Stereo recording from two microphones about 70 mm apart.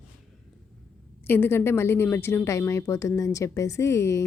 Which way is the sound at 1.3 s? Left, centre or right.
Left.